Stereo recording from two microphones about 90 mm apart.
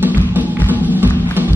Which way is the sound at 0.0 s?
20° right (ahead or behind).